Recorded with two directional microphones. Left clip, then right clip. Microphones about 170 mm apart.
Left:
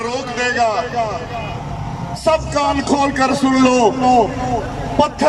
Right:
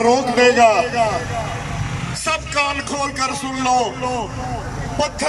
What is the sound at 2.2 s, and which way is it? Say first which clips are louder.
Speech: left 4 dB; 35° left (ahead or behind).